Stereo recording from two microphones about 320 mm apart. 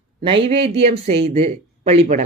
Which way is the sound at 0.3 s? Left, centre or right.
Centre.